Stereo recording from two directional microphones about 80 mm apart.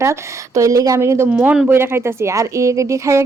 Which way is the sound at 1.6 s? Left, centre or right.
Right.